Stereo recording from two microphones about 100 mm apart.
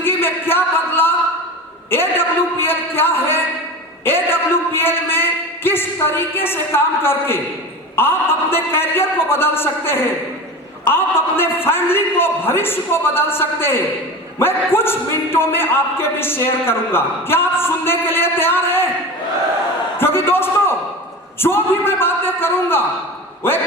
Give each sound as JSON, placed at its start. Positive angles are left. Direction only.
{"t": 0.0, "sound": "a sound", "side_deg": 20}
{"t": 4.0, "sound": "a man's voice", "side_deg": 25}
{"t": 20.0, "sound": "a man's voice", "side_deg": 25}